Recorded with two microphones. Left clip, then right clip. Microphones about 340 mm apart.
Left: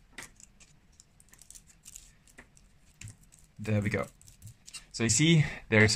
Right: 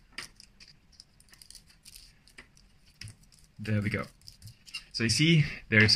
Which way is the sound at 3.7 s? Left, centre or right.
Centre.